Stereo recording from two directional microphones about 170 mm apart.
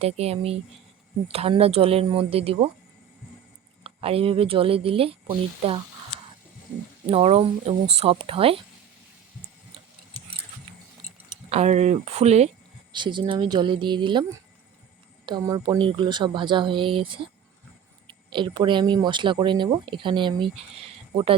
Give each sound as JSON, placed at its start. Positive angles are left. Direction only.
{"t": 0.0, "sound": "speech", "side_deg": -35}
{"t": 3.8, "sound": "speech", "side_deg": -35}
{"t": 7.1, "sound": "speech", "side_deg": -35}
{"t": 11.4, "sound": "speech", "side_deg": -40}
{"t": 12.9, "sound": "speech", "side_deg": -25}
{"t": 15.3, "sound": "speech", "side_deg": -20}